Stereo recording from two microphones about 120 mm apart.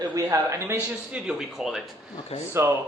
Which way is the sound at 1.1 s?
5° right (ahead or behind).